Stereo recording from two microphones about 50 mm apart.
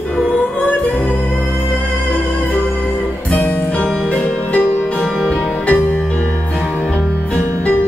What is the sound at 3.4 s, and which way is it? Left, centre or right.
Music, left.